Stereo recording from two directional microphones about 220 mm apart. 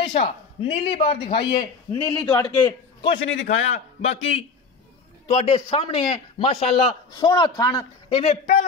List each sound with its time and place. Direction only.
0.0 s a man's voice: 25° left (ahead or behind)